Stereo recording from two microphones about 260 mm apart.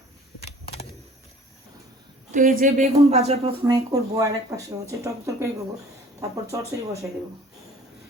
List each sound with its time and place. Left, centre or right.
2.3 s a woman's voice: right; by 7.0 s centre